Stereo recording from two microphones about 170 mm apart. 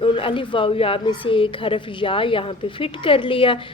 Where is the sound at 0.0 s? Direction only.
30° left (ahead or behind).